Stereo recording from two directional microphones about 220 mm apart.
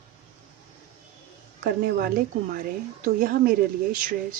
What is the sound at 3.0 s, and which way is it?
Speech, 40° right (ahead or behind).